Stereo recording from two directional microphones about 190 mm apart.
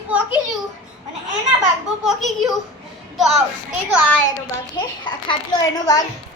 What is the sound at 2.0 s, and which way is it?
A child's voice, centre (ahead or behind).